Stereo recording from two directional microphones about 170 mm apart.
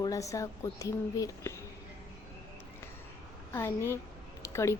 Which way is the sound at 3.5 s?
15° left (ahead or behind).